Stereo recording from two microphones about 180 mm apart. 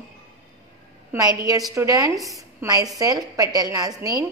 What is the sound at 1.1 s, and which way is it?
A woman's voice, 20° right (ahead or behind).